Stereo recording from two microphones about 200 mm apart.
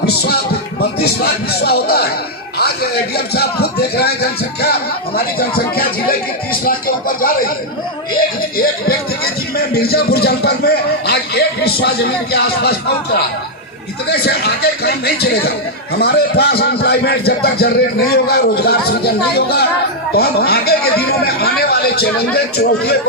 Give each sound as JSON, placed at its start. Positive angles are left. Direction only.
{"t": 1.0, "sound": "a man's voice", "side_deg": 50}
{"t": 14.1, "sound": "a man's voice", "side_deg": 50}